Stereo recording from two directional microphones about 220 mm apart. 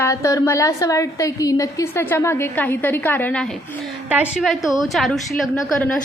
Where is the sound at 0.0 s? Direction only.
15° left (ahead or behind).